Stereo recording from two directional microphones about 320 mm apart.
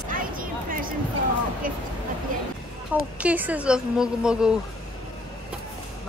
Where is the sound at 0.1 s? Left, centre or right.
Right.